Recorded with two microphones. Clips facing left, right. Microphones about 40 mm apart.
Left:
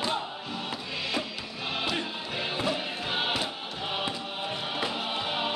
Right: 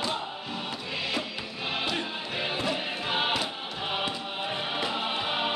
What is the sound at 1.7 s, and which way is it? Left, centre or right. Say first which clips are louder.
Music: even; centre.